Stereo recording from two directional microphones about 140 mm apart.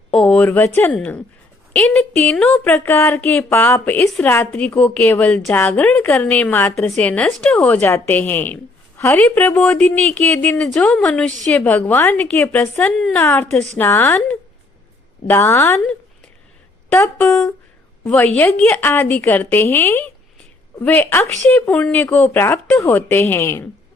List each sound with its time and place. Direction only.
0.1 s speech: 5° left (ahead or behind)
2.7 s speech: 15° left (ahead or behind)
15.3 s speech: 15° left (ahead or behind)
18.0 s a woman's voice: 20° left (ahead or behind)